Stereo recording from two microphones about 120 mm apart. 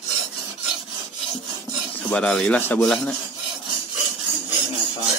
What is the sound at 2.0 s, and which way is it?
Rub, 5° left (ahead or behind).